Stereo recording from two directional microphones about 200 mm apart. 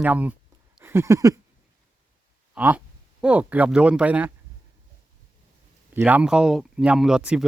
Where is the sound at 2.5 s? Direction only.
10° right (ahead or behind).